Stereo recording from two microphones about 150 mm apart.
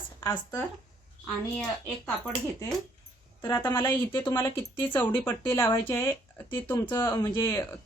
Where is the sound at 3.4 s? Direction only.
20° left (ahead or behind).